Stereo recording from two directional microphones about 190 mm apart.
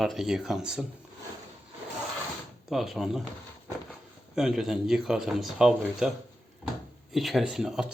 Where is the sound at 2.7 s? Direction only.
Centre (ahead or behind).